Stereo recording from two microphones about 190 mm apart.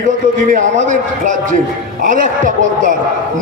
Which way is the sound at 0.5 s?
40° right (ahead or behind).